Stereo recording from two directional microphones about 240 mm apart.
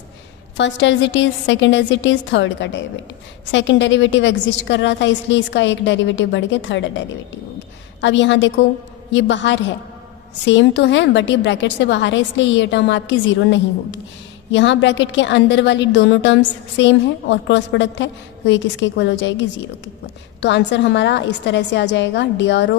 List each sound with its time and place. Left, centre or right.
0.5 s a woman's voice: left
8.0 s a woman's voice: left